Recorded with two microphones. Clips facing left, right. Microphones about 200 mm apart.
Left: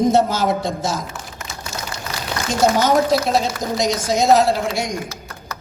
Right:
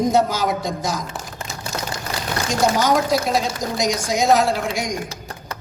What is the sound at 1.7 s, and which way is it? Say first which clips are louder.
Rain: right 3 dB; 55° right (ahead or behind).